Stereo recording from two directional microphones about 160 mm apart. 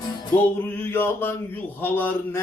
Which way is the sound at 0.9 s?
15° left (ahead or behind).